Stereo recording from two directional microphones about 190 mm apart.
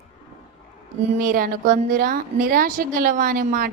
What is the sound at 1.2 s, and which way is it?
A woman's voice, 45° right (ahead or behind).